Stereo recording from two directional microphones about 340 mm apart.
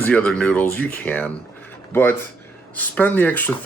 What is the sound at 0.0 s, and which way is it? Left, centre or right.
Speech, centre.